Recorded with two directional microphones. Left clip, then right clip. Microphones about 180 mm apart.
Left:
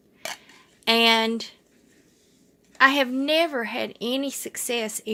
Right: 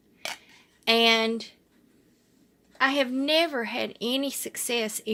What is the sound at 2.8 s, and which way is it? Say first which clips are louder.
A woman's voice: left 5 dB; 20° left (ahead or behind).